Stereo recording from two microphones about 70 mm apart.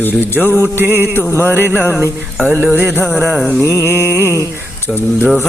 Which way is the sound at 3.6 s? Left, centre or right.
Left.